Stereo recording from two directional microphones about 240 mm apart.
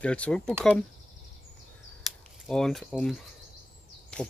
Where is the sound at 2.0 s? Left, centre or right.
Centre.